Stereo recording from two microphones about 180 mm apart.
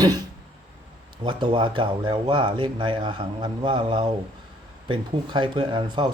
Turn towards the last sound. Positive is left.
turn(degrees=-25)  # may be behind; listen again after turning